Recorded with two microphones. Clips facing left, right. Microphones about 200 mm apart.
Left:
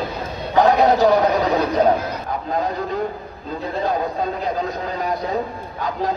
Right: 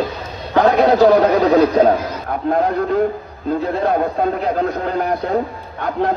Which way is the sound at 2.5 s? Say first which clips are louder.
Right 6 dB; 60° right (ahead or behind).